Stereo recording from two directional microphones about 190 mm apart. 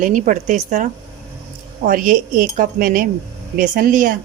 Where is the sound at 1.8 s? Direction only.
45° right (ahead or behind).